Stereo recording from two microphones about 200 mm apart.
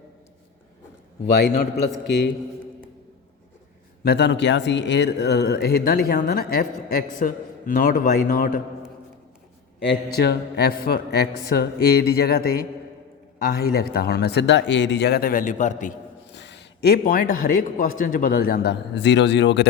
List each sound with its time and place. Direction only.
1.2 s a man's voice: 55° left (ahead or behind)
4.0 s speech: 55° left (ahead or behind)
9.8 s speech: 55° left (ahead or behind); by 16.0 s 40° left (ahead or behind)
16.3 s speech: 60° left (ahead or behind)